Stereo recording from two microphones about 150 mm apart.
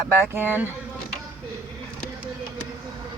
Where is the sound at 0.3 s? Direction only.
15° right (ahead or behind).